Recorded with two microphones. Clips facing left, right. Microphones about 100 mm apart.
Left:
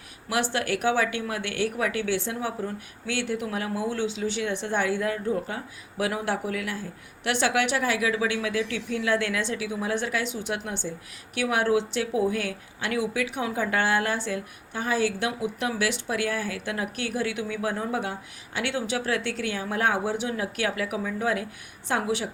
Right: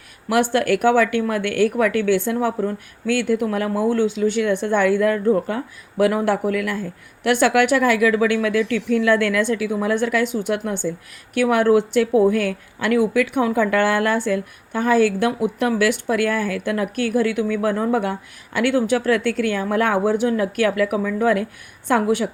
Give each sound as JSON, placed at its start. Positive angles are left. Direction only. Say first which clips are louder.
{"t": 0.3, "sound": "speech", "louder": "right 9 dB", "side_deg": -55}
{"t": 21.2, "sound": "a woman's voice", "louder": "right 9 dB", "side_deg": -55}